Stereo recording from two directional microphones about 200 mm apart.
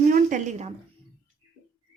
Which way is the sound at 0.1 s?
40° right (ahead or behind).